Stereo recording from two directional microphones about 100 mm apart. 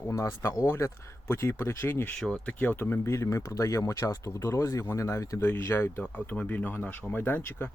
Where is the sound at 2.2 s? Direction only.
10° left (ahead or behind).